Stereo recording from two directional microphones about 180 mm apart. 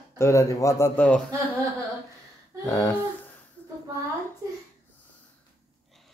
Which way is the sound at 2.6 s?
20° left (ahead or behind).